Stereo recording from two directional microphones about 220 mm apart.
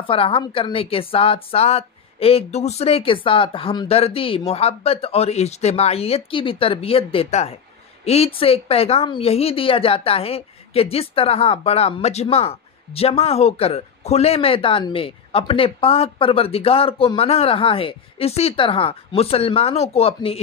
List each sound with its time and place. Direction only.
0.0 s speech: 25° left (ahead or behind)